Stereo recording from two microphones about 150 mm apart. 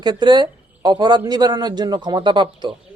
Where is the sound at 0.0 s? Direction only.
30° right (ahead or behind).